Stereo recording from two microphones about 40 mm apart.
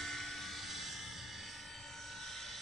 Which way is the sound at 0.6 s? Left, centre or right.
Centre.